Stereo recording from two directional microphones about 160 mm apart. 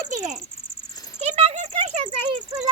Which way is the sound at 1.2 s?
40° right (ahead or behind).